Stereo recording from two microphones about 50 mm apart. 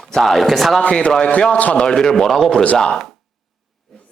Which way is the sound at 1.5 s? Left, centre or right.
Left.